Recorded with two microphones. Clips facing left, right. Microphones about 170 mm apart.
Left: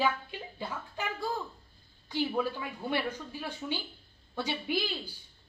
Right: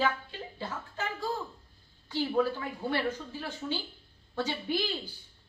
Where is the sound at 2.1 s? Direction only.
15° left (ahead or behind).